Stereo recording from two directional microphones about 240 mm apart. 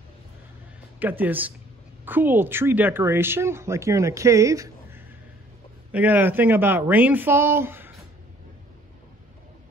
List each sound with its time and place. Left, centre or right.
0.9 s a woman's voice: centre